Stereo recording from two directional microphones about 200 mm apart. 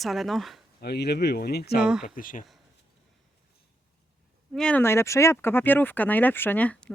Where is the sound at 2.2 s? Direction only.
45° left (ahead or behind).